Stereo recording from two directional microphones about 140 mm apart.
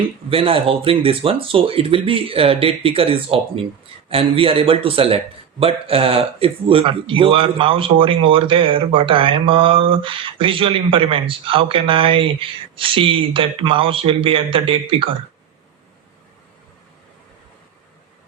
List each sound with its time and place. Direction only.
0.3 s a man's voice: 40° right (ahead or behind)